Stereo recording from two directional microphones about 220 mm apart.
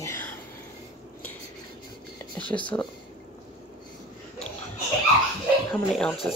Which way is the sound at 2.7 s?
10° left (ahead or behind).